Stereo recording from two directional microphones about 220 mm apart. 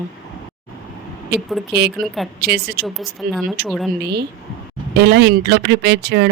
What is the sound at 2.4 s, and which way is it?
Speech, 45° right (ahead or behind).